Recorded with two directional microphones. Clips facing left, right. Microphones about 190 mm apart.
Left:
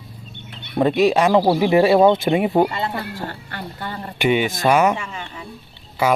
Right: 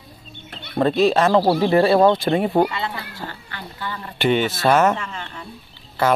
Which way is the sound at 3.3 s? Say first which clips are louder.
Left 4 dB; 50° left (ahead or behind).